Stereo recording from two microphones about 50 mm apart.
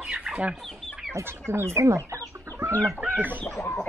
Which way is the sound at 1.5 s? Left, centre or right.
Right.